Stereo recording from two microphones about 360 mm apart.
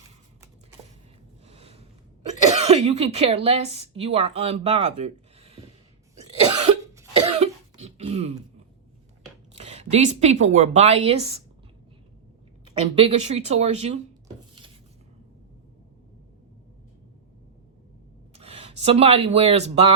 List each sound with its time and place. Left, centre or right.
1.5 s a sound: centre
2.6 s speech: centre
6.7 s cough: centre
9.6 s a woman's voice: centre
12.6 s a woman's voice: centre
18.3 s speech: centre